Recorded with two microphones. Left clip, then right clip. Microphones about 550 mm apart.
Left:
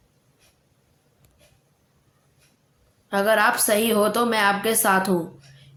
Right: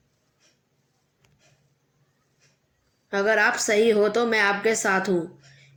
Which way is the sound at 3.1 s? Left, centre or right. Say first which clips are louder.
Left 2 dB; left.